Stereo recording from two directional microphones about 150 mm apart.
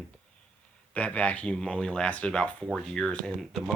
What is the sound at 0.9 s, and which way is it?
Speech, 10° left (ahead or behind).